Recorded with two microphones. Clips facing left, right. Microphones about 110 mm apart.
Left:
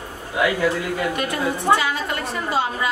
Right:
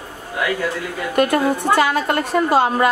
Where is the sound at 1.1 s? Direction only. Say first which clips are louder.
Right 7 dB; 50° right (ahead or behind).